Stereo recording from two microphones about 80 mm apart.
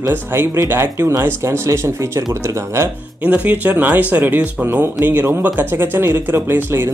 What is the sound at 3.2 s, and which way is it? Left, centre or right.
Speech, centre.